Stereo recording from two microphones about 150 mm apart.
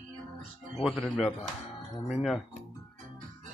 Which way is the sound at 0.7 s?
Centre (ahead or behind).